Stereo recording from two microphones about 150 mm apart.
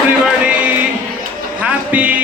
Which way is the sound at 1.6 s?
10° right (ahead or behind).